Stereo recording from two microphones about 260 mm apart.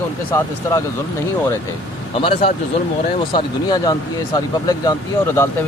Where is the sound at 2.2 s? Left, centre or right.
Left.